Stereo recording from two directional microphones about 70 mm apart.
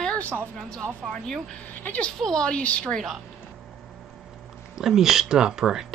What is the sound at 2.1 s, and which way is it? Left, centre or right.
Speech, centre.